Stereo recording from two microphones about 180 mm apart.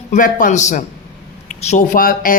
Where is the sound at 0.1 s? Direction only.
45° left (ahead or behind).